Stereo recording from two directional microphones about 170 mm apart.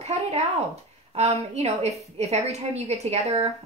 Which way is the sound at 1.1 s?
40° right (ahead or behind).